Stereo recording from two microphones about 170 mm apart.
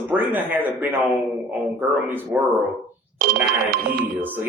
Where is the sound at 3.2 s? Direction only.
55° right (ahead or behind).